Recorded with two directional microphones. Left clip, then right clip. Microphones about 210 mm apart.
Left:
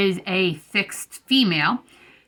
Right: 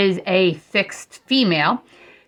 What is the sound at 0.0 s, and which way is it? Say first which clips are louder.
Speech: right 4 dB; 30° left (ahead or behind).